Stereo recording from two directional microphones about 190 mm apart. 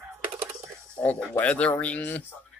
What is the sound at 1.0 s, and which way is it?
Speech, 5° left (ahead or behind).